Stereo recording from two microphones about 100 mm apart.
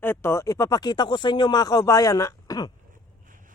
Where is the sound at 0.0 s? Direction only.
25° left (ahead or behind); by 2.7 s 40° left (ahead or behind).